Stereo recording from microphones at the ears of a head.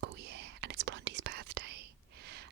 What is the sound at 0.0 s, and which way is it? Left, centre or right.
Whispering, right.